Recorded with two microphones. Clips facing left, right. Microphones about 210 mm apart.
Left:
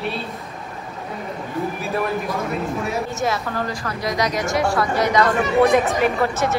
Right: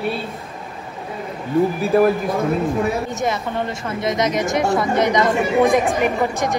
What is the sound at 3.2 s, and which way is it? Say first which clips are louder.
A woman's voice: even; 20° right (ahead or behind).